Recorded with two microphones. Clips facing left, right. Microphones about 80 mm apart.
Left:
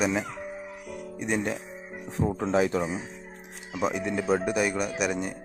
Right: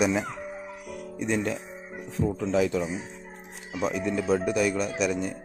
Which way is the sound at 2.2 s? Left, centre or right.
Left.